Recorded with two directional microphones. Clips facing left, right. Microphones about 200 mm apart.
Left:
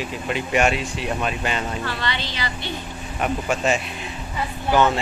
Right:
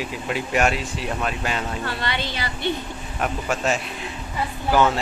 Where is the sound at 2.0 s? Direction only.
55° right (ahead or behind).